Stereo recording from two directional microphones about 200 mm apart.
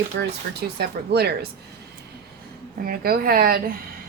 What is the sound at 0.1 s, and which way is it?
A woman's voice, 55° right (ahead or behind).